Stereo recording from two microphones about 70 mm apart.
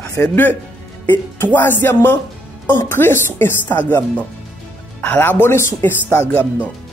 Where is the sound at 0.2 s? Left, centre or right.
Left.